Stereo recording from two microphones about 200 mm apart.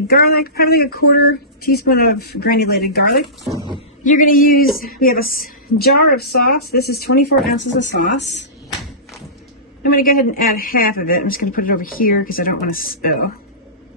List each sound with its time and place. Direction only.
0.1 s a woman's voice: 50° left (ahead or behind)
4.0 s a woman's voice: 40° left (ahead or behind); by 8.5 s 60° left (ahead or behind)
10.0 s a woman's voice: 45° left (ahead or behind)